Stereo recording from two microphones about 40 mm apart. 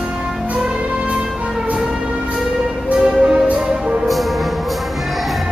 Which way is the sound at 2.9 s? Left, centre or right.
Right.